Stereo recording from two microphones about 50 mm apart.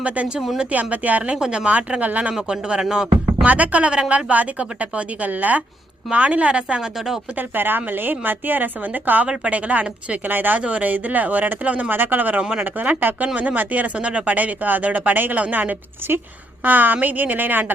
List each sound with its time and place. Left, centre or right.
0.3 s speech: centre
0.7 s speech: right
1.4 s a woman's voice: centre
1.7 s speech: right
2.3 s a woman's voice: centre
3.3 s a woman's voice: right
7.3 s speech: right
10.6 s speech: right
12.4 s a woman's voice: right
12.8 s speech: right